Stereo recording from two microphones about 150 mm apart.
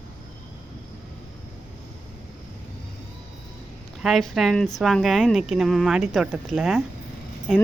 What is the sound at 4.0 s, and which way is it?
Speech, centre (ahead or behind).